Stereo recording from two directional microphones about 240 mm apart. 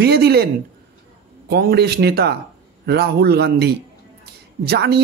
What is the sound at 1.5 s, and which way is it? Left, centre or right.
A man's voice, right.